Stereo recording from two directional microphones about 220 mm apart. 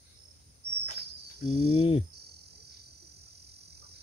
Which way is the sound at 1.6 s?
25° left (ahead or behind).